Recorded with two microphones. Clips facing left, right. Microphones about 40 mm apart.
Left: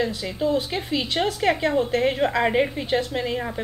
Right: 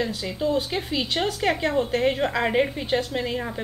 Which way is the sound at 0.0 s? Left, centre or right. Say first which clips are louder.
Left 2 dB; centre.